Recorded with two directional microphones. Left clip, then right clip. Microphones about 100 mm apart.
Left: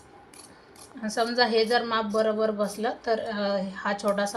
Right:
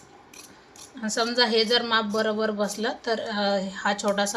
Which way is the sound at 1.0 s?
30° right (ahead or behind).